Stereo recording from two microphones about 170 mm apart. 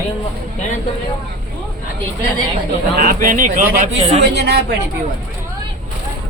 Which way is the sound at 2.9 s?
55° right (ahead or behind).